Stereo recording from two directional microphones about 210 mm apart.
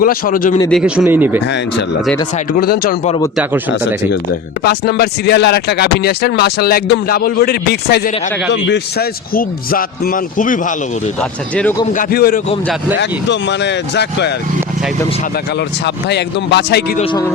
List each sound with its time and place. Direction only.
0.0 s speech: 40° left (ahead or behind)
0.7 s speech: 5° right (ahead or behind)
2.5 s speech: 45° left (ahead or behind)
4.6 s speech: 50° left (ahead or behind)
11.2 s speech: 5° left (ahead or behind)
11.9 s speech: 45° left (ahead or behind)
13.0 s speech: 55° left (ahead or behind)
16.0 s speech: 55° left (ahead or behind)
17.0 s speech: 25° left (ahead or behind)